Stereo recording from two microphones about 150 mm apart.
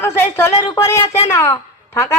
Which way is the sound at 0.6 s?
25° left (ahead or behind).